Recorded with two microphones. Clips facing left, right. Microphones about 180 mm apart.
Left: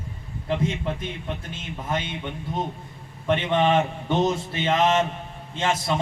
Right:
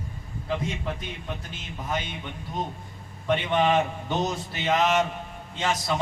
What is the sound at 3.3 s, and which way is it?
A man's voice, 25° left (ahead or behind).